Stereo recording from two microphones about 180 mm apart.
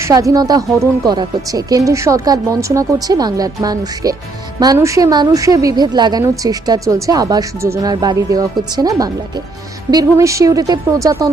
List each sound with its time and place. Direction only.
0.0 s a woman's voice: 15° right (ahead or behind)